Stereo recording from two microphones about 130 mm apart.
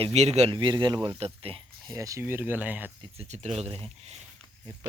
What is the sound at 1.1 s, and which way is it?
Speech, 50° right (ahead or behind).